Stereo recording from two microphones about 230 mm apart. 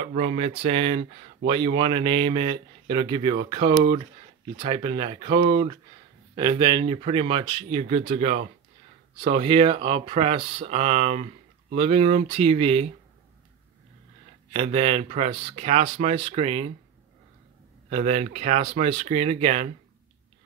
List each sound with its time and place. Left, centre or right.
0.0 s speech: right
14.5 s speech: right
17.8 s speech: right